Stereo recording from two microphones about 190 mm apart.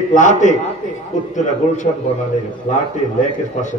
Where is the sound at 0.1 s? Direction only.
40° left (ahead or behind).